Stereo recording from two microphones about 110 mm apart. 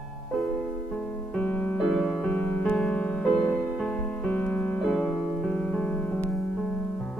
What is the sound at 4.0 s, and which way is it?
Music, 15° left (ahead or behind).